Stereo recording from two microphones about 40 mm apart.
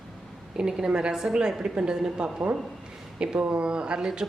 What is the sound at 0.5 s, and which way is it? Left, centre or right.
A woman's voice, centre.